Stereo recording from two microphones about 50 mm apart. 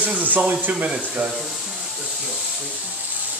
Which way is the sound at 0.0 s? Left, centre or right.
Right.